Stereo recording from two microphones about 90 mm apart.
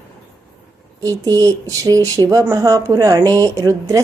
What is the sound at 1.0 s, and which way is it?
Speech, 40° right (ahead or behind).